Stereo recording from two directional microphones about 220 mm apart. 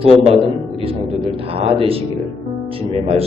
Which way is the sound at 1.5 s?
25° right (ahead or behind).